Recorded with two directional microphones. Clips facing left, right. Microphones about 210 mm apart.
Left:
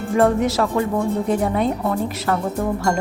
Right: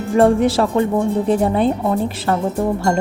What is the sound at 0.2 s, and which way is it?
Speech, 30° right (ahead or behind).